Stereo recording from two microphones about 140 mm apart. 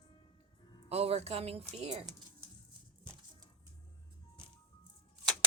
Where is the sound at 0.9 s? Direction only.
45° right (ahead or behind).